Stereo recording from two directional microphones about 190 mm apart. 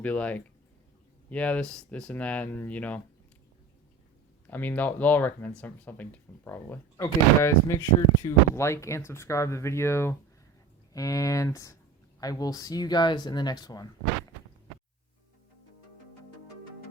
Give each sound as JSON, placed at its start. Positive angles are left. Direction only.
{"t": 0.0, "sound": "speech", "side_deg": 5}
{"t": 4.4, "sound": "speech", "side_deg": 10}